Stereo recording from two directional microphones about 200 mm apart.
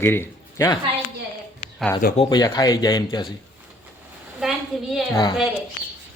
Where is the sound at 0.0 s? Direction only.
10° left (ahead or behind).